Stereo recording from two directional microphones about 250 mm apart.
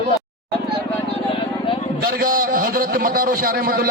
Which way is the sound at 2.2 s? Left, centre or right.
Right.